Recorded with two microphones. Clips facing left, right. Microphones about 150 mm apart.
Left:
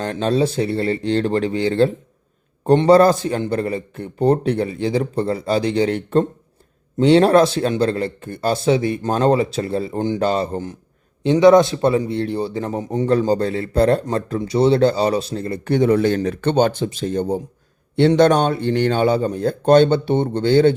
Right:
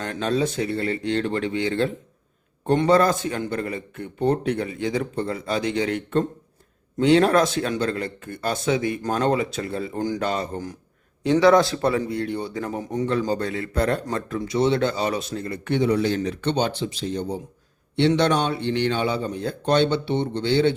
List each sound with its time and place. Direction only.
0.0 s a man's voice: 30° left (ahead or behind)